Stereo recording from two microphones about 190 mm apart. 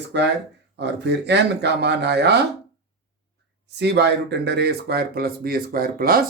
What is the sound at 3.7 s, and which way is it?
A man's voice, 60° right (ahead or behind).